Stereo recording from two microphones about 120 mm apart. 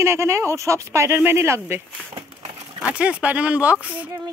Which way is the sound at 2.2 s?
45° right (ahead or behind).